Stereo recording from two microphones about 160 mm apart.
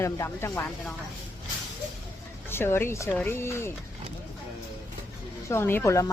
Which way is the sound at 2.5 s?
15° left (ahead or behind).